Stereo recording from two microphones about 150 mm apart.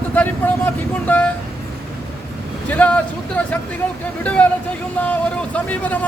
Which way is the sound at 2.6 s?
10° left (ahead or behind).